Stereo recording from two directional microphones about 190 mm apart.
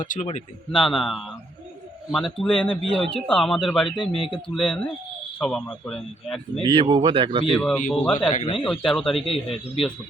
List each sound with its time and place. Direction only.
0.0 s speech: 40° left (ahead or behind)
0.7 s speech: centre (ahead or behind)
6.6 s speech: 25° right (ahead or behind)
7.5 s speech: centre (ahead or behind)
8.1 s a man's voice: 25° left (ahead or behind)
8.8 s speech: centre (ahead or behind)
9.1 s a man's voice: 30° left (ahead or behind)